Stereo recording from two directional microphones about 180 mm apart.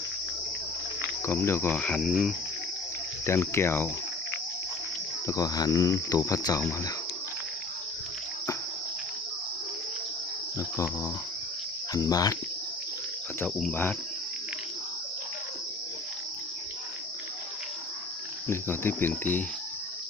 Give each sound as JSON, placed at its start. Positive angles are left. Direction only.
{"t": 1.2, "sound": "speech", "side_deg": 15}
{"t": 3.2, "sound": "speech", "side_deg": 15}
{"t": 5.2, "sound": "speech", "side_deg": 20}
{"t": 11.9, "sound": "speech", "side_deg": 20}
{"t": 13.4, "sound": "speech", "side_deg": 5}
{"t": 18.4, "sound": "speech", "side_deg": 15}